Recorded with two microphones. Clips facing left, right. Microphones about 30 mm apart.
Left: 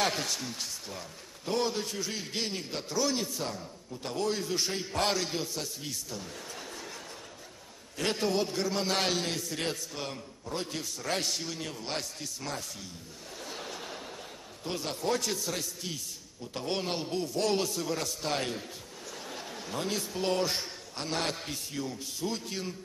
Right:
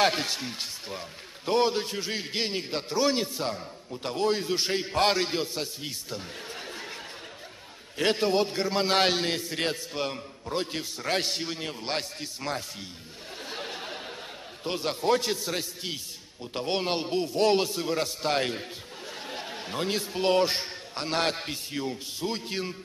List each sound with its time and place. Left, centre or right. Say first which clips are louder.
0.0 s a man's voice: right 5 dB; right
8.0 s a man's voice: right 5 dB; right
13.4 s a sound: right 4 dB; right
14.6 s a man's voice: right 5 dB; right